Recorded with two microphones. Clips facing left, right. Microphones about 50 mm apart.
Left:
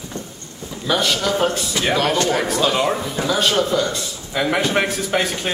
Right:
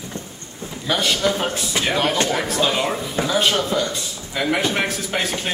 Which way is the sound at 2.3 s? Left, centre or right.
Centre.